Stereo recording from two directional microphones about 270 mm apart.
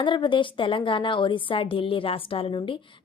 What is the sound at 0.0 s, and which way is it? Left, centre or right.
A woman's voice, centre.